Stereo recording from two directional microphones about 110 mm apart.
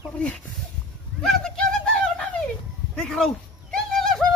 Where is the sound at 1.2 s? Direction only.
5° left (ahead or behind).